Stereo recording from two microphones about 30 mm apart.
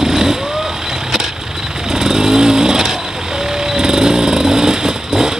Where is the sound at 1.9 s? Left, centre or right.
Centre.